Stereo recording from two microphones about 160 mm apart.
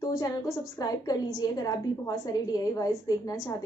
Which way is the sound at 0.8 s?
25° left (ahead or behind).